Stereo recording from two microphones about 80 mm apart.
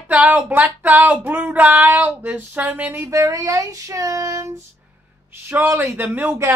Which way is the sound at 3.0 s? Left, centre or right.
Right.